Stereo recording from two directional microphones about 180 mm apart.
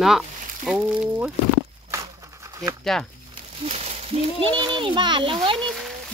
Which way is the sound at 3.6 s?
35° right (ahead or behind).